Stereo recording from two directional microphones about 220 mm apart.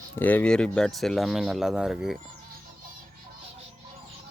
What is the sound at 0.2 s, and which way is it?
Speech, 5° left (ahead or behind).